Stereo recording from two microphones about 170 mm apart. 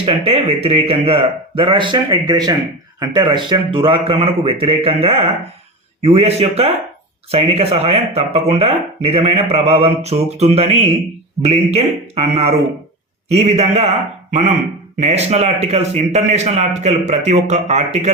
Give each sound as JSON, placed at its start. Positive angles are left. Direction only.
{"t": 0.0, "sound": "speech", "side_deg": -35}
{"t": 14.9, "sound": "speech", "side_deg": -40}